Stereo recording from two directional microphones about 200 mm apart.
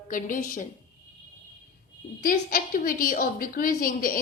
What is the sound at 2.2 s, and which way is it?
A woman's voice, 45° left (ahead or behind).